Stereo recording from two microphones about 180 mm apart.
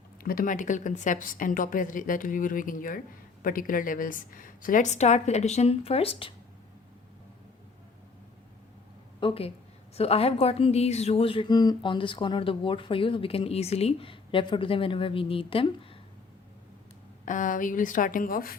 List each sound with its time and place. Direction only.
0.2 s a woman's voice: 55° left (ahead or behind); by 6.3 s 30° left (ahead or behind)
9.2 s a woman's voice: 30° left (ahead or behind)
17.2 s a woman's voice: 45° left (ahead or behind)